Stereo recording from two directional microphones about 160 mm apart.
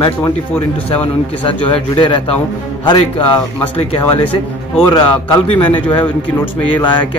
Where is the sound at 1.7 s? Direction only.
30° left (ahead or behind).